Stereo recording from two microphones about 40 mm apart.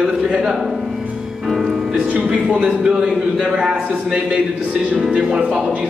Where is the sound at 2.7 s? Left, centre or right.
Centre.